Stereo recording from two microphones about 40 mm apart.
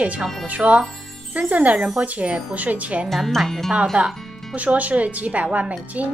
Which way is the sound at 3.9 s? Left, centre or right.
Right.